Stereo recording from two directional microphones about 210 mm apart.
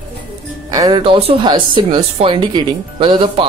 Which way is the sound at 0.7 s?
20° right (ahead or behind).